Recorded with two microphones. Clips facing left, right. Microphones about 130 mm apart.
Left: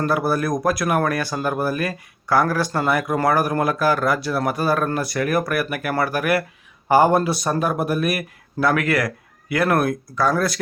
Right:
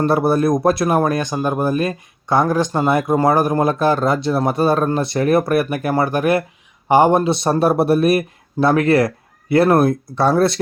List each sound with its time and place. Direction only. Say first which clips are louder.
0.0 s speech: right 5 dB; 25° right (ahead or behind)